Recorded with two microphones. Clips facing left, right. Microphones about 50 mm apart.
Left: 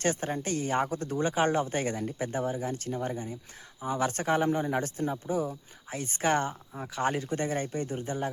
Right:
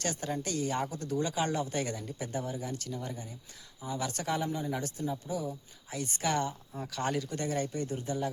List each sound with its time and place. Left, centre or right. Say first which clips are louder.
0.0 s speech: left 5 dB; left